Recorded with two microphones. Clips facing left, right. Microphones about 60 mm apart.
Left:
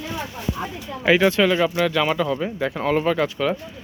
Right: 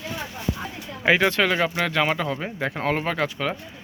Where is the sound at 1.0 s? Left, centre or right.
Right.